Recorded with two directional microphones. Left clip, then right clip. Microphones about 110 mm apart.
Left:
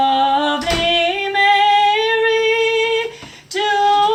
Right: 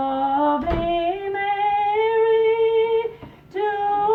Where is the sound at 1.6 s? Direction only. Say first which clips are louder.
Left 6 dB; 30° left (ahead or behind).